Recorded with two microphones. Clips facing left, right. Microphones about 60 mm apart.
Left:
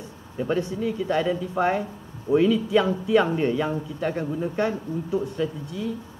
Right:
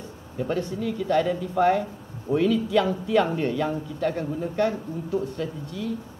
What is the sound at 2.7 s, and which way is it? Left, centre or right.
Speech, left.